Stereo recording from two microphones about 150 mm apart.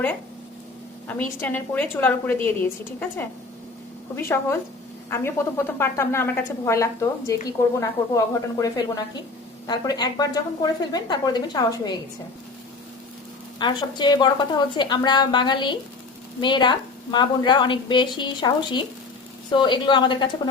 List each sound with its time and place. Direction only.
1.4 s a woman's voice: 10° left (ahead or behind)
4.1 s a woman's voice: 15° left (ahead or behind)
13.6 s a woman's voice: 30° left (ahead or behind)